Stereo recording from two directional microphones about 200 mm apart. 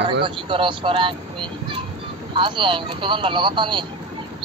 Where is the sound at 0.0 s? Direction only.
25° right (ahead or behind).